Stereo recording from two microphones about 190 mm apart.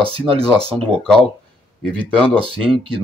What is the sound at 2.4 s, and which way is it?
Speech, 30° right (ahead or behind).